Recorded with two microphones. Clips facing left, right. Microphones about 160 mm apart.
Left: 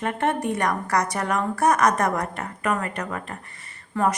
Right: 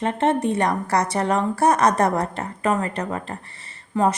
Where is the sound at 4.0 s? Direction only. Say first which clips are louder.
Right 3 dB; 20° right (ahead or behind).